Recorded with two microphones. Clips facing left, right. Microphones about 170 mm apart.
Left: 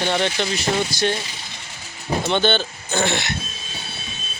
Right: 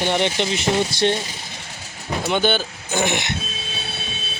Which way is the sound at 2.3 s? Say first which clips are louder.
Right 1 dB; 10° right (ahead or behind).